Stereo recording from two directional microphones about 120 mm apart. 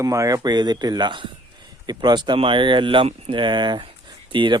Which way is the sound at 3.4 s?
40° right (ahead or behind).